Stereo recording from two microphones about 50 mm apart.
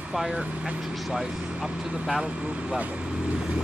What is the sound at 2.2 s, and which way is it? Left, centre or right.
Speech, right.